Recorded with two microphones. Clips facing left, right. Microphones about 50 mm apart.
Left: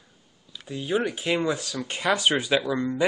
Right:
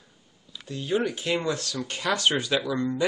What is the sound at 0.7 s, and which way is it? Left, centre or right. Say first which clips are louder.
Speech: even; centre.